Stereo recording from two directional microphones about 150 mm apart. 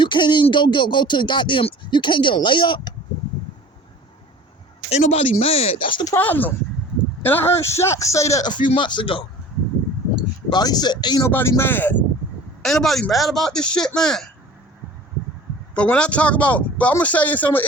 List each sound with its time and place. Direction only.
0.0 s speech: 30° left (ahead or behind)
4.9 s speech: 50° left (ahead or behind); by 6.1 s 30° left (ahead or behind)
6.1 s speech: 10° left (ahead or behind); by 9.2 s 35° left (ahead or behind)
10.5 s speech: 25° left (ahead or behind)
11.3 s speech: 15° left (ahead or behind)
12.6 s a man's voice: centre (ahead or behind)
15.7 s speech: 5° left (ahead or behind)